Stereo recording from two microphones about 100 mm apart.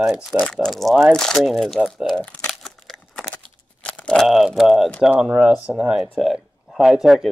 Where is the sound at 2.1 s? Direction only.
10° left (ahead or behind).